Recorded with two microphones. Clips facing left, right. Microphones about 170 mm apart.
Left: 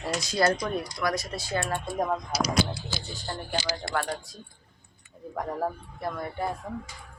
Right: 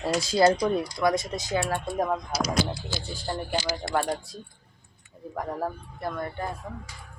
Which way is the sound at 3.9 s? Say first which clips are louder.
Right 4 dB; 25° right (ahead or behind).